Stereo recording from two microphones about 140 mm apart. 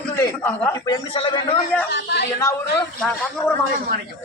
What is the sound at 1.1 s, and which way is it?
Speech, 40° left (ahead or behind).